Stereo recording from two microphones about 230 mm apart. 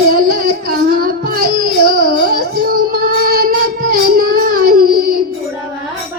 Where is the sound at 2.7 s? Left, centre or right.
Right.